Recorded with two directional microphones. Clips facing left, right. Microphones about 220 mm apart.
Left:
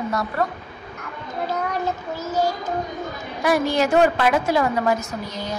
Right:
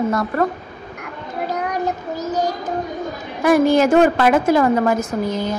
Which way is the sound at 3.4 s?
50° right (ahead or behind).